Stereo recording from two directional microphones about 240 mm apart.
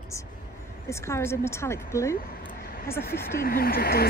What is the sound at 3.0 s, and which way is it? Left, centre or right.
Speech, left.